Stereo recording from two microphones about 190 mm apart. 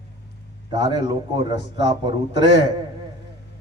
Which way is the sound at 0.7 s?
20° right (ahead or behind).